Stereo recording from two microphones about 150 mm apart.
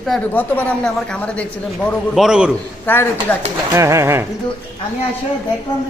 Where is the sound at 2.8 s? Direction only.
15° left (ahead or behind).